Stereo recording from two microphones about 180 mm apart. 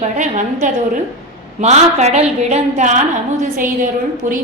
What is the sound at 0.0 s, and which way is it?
A woman's voice, 40° right (ahead or behind).